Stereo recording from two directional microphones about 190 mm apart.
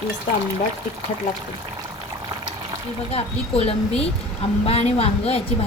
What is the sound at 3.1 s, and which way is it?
A woman's voice, 30° left (ahead or behind).